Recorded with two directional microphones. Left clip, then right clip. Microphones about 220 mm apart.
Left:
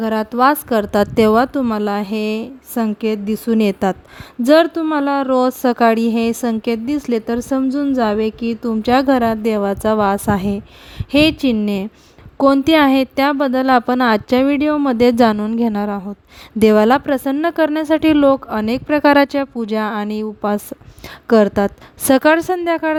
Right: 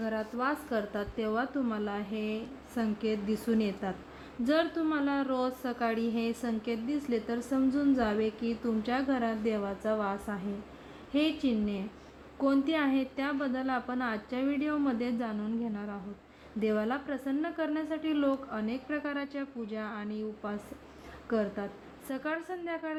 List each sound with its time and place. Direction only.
0.0 s a woman's voice: 50° left (ahead or behind)